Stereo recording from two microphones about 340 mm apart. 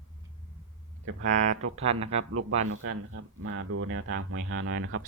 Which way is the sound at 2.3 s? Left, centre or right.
Right.